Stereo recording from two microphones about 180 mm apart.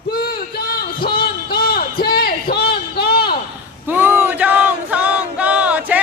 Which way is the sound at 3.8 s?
10° right (ahead or behind).